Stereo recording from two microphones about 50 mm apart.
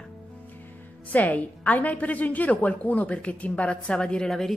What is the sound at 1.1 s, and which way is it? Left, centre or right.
A woman's voice, left.